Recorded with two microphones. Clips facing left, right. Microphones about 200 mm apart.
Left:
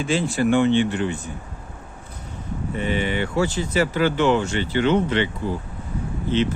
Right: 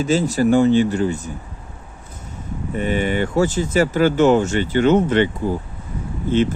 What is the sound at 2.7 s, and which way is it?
Speech, 45° right (ahead or behind).